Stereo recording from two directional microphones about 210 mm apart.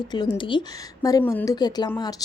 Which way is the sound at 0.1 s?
20° left (ahead or behind).